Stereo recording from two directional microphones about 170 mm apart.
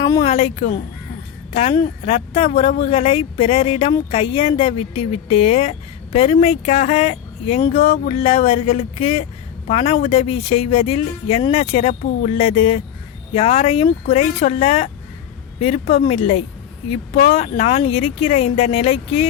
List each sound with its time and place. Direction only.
0.0 s speech: 25° left (ahead or behind)
0.3 s speech: 35° left (ahead or behind)
7.9 s speech: 35° left (ahead or behind)